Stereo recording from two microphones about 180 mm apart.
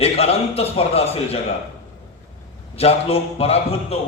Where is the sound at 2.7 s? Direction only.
35° left (ahead or behind).